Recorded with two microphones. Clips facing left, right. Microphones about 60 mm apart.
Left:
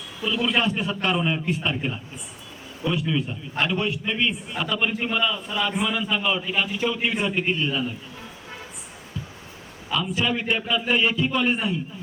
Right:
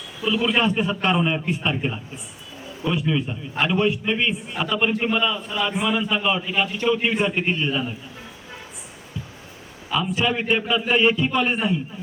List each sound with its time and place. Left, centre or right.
0.2 s a man's voice: centre
3.1 s a man's voice: centre
9.9 s a man's voice: centre